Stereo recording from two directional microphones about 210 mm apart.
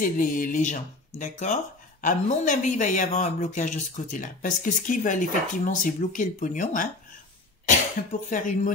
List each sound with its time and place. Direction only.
0.0 s speech: 40° left (ahead or behind)
8.3 s speech: 40° left (ahead or behind)